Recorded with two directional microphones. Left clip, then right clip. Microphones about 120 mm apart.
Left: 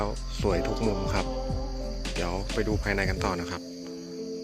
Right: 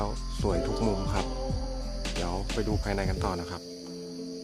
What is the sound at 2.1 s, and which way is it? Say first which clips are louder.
Music: left 3 dB; centre (ahead or behind).